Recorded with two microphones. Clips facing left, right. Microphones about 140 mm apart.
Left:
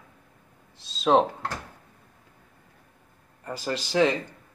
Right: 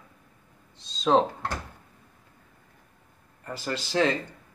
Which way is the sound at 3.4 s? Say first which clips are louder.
Left 2 dB; 15° left (ahead or behind).